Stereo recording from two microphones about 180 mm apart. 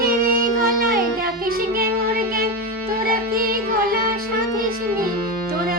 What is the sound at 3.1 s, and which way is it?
Music, 55° right (ahead or behind).